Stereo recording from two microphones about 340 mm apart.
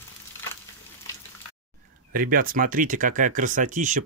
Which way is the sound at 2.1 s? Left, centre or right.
Right.